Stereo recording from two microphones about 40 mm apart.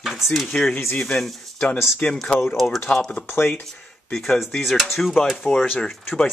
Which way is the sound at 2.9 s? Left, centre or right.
Left.